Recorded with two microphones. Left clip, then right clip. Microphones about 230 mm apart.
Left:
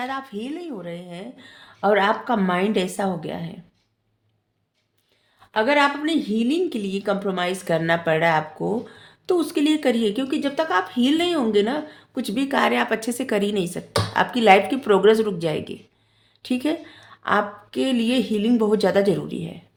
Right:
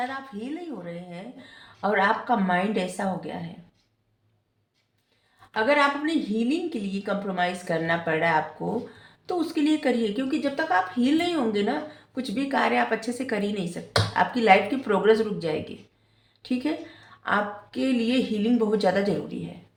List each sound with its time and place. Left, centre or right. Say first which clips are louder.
0.0 s a woman's voice: left 3 dB; left
5.5 s a woman's voice: left 3 dB; left